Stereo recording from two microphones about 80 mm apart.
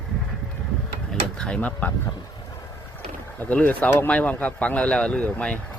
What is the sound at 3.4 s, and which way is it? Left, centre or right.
Speech, centre.